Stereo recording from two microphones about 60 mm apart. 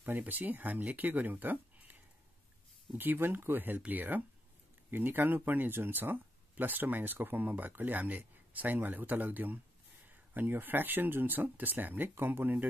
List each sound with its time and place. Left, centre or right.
0.0 s speech: right
3.0 s speech: right